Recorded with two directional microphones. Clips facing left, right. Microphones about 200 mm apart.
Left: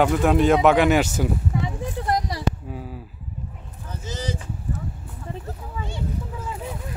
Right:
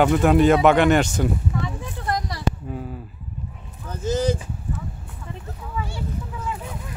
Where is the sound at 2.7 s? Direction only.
Centre (ahead or behind).